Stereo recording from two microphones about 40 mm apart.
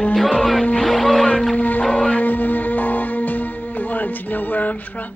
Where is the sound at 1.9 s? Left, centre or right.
Left.